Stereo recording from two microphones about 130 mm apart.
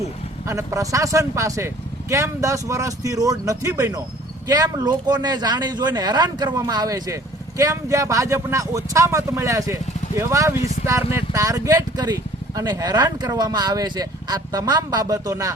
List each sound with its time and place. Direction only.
0.4 s speech: 25° right (ahead or behind)